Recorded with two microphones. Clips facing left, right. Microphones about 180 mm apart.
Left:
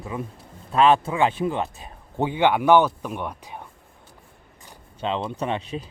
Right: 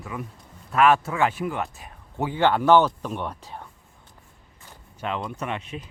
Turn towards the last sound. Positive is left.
turn(degrees=35)  # may be behind; listen again after turning